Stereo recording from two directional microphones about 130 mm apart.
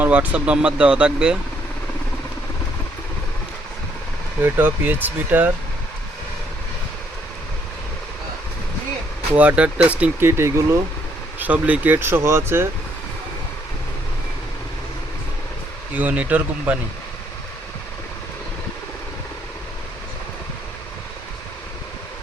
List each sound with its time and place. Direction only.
0.0 s speech: 10° right (ahead or behind)
4.4 s speech: 15° right (ahead or behind)
9.3 s speech: 10° right (ahead or behind)
16.0 s speech: 10° right (ahead or behind)